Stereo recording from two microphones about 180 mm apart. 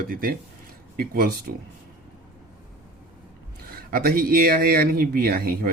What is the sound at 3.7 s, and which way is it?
Speech, 55° right (ahead or behind).